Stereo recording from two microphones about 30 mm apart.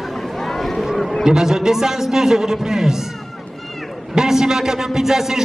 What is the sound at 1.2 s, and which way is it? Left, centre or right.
A man's voice, centre.